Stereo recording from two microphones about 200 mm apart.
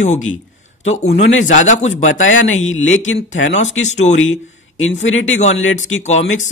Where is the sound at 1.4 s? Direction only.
40° left (ahead or behind).